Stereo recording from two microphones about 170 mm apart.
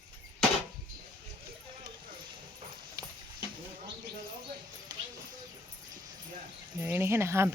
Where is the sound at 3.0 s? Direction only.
20° right (ahead or behind).